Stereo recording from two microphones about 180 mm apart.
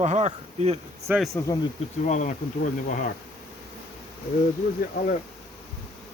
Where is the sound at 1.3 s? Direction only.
15° left (ahead or behind).